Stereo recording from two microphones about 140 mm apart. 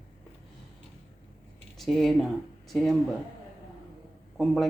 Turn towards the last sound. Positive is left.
turn(degrees=0)  # may be behind; listen again after turning